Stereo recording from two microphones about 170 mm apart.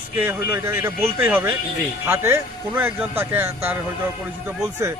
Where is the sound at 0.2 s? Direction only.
15° right (ahead or behind).